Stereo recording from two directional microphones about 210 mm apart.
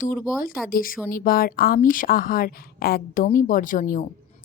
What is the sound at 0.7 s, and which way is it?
A woman's voice, 40° left (ahead or behind).